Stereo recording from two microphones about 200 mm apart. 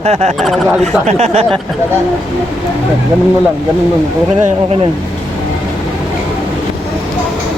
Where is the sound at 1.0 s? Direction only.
35° right (ahead or behind).